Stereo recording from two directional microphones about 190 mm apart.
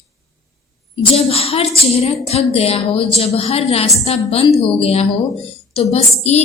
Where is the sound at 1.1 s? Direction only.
30° left (ahead or behind).